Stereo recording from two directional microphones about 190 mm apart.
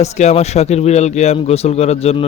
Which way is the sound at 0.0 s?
35° left (ahead or behind).